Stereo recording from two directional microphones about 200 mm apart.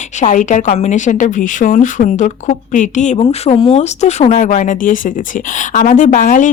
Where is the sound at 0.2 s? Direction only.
40° left (ahead or behind).